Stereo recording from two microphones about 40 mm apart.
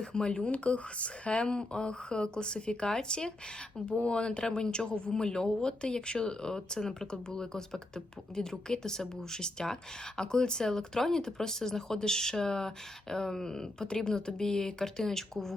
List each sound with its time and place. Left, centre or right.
0.0 s speech: left; by 15.5 s centre